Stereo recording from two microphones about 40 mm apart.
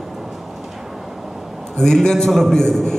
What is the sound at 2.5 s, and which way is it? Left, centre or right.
Speech, centre.